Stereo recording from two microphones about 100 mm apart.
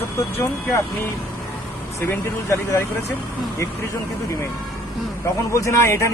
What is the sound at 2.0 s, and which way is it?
Speech, 30° left (ahead or behind).